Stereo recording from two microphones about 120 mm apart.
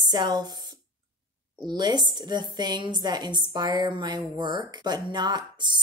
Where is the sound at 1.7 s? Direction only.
35° right (ahead or behind).